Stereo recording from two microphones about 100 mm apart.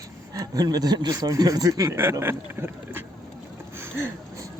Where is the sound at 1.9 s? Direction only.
25° right (ahead or behind).